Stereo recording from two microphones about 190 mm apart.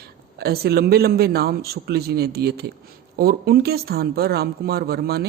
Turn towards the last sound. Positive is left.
turn(degrees=-55)  # may be behind; listen again after turning